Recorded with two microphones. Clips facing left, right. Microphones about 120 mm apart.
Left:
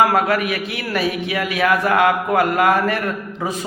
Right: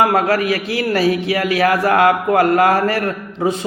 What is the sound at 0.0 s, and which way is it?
A man's voice, 35° right (ahead or behind).